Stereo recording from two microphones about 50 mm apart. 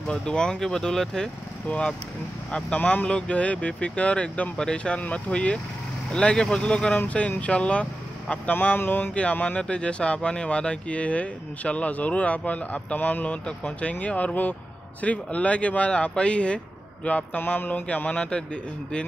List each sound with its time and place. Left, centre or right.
0.1 s speech: centre
2.5 s speech: left
4.6 s speech: centre
4.9 s speech: left
8.3 s speech: left
8.7 s a sound: left
9.1 s speech: left
17.6 s speech: left; by 19.0 s centre